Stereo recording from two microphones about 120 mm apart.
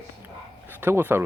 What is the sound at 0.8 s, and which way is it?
Speech, 20° right (ahead or behind).